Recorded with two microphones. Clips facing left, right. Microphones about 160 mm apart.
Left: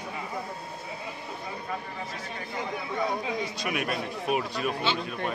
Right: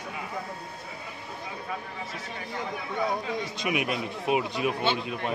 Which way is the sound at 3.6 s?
20° right (ahead or behind).